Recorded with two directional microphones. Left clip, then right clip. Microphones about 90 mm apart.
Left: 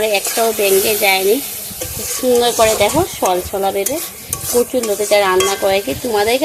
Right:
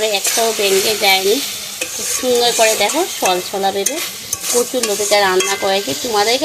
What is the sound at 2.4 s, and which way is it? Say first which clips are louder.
Stir: left 1 dB; 15° left (ahead or behind).